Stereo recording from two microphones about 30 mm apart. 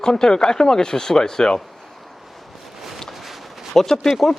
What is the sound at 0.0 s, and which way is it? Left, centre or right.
Speech, left.